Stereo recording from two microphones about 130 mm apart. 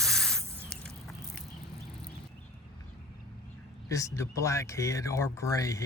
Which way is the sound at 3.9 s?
25° left (ahead or behind).